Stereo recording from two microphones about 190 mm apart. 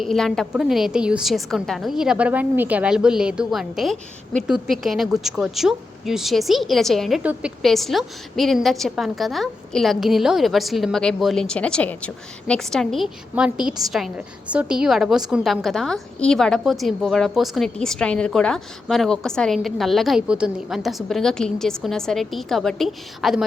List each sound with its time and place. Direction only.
0.0 s speech: centre (ahead or behind)